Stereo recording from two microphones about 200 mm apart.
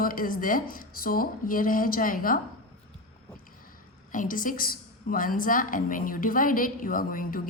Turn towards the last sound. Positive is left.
turn(degrees=45)  # may be behind; listen again after turning